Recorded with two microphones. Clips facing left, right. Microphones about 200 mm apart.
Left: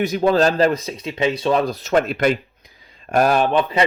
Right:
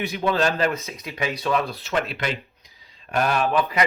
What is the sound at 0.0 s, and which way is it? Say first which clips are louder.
Speech: left 6 dB; 40° left (ahead or behind).